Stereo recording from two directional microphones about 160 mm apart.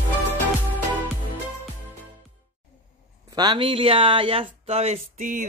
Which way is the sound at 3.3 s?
30° right (ahead or behind).